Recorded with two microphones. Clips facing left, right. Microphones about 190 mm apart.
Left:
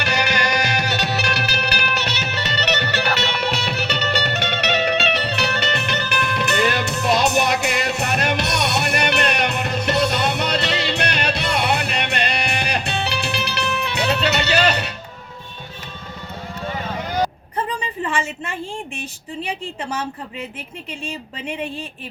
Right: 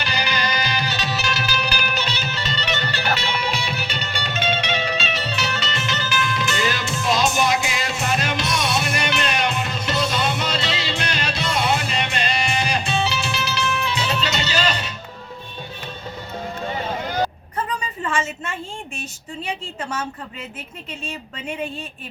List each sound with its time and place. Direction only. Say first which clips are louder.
0.0 s music: left 3 dB; 70° left (ahead or behind)